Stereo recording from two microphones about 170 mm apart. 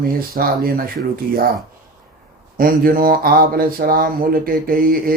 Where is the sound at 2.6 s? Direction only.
55° right (ahead or behind).